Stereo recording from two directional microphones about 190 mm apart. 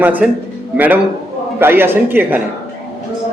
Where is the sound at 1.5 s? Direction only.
10° right (ahead or behind).